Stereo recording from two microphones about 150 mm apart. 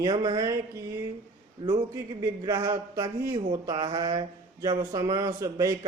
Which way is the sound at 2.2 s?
25° right (ahead or behind).